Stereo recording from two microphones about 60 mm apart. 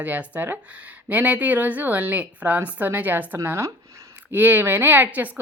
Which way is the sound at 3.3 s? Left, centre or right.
Right.